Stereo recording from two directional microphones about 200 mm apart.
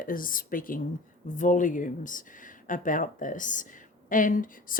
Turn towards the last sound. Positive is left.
turn(degrees=40)  # may be behind; listen again after turning